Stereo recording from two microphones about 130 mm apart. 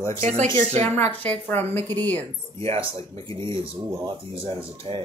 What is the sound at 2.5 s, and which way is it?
Speech, 45° right (ahead or behind).